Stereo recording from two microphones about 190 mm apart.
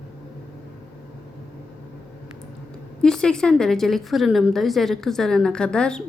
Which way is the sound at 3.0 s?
5° left (ahead or behind).